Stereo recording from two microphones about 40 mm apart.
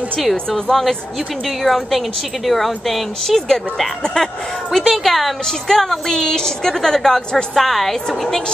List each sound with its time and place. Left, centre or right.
0.2 s a woman's voice: centre